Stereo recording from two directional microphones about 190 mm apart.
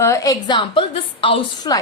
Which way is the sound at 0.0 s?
15° left (ahead or behind).